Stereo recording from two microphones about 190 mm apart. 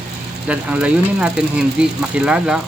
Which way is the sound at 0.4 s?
5° right (ahead or behind).